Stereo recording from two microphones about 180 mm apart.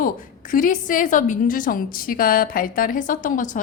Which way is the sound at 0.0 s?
50° left (ahead or behind).